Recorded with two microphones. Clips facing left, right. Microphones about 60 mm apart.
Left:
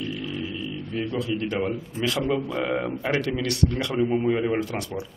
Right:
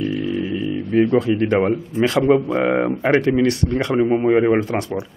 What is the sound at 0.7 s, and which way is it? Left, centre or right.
A man's voice, right.